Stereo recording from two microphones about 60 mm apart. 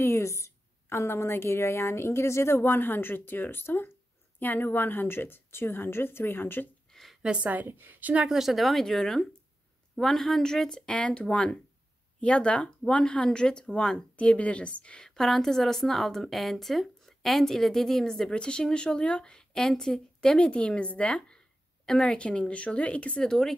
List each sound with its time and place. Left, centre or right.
0.0 s a woman's voice: left
6.9 s a sound: centre
7.2 s a woman's voice: centre
7.4 s a woman's voice: right
8.3 s speech: centre; by 23.3 s left